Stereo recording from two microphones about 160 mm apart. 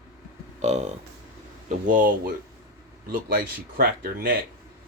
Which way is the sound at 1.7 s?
55° right (ahead or behind).